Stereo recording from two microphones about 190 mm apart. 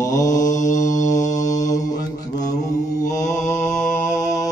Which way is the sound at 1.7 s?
20° left (ahead or behind).